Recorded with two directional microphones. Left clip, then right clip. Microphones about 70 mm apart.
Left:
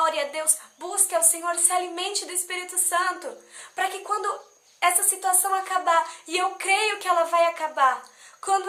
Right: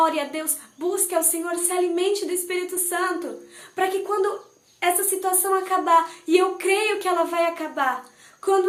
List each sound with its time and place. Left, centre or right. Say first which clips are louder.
0.0 s a woman's voice: right 2 dB; left